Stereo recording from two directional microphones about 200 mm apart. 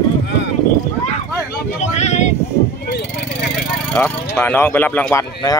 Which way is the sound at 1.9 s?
35° left (ahead or behind).